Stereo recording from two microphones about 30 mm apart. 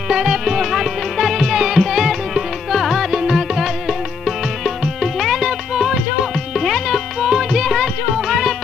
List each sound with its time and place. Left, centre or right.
0.1 s music: centre
0.6 s music: centre
3.1 s music: centre
3.3 s music: centre
6.5 s music: centre